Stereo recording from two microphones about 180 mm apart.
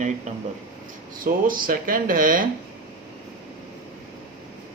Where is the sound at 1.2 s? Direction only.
50° right (ahead or behind).